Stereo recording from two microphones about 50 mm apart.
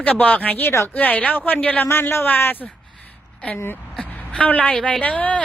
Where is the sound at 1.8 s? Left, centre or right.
Left.